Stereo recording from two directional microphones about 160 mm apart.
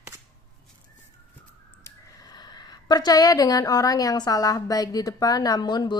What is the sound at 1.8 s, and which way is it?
A woman's voice, 25° left (ahead or behind).